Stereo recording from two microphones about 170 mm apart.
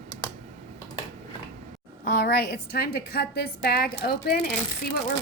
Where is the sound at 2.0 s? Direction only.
60° left (ahead or behind).